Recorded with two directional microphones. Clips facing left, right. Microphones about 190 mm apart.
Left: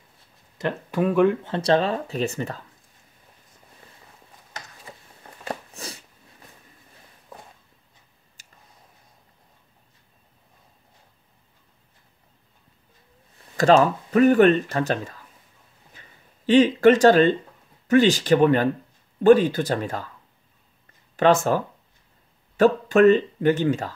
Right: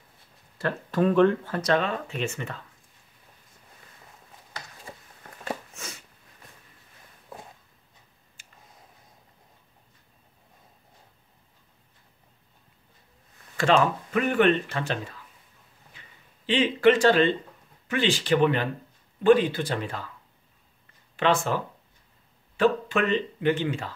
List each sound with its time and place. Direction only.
0.6 s speech: 20° left (ahead or behind)
1.4 s speech: 25° left (ahead or behind)
5.8 s a sound: 35° left (ahead or behind)
8.4 s tick: 40° left (ahead or behind)
13.6 s speech: 40° left (ahead or behind)
16.4 s speech: 45° left (ahead or behind)
21.2 s speech: 45° left (ahead or behind)